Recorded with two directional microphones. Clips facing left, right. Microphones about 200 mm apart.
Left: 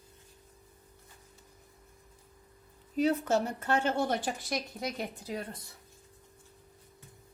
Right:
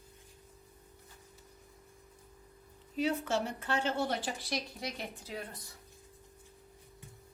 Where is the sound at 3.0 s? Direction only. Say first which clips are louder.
Left 5 dB; 40° left (ahead or behind).